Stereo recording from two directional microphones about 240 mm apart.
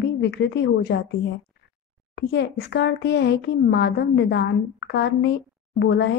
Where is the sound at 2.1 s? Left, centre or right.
Left.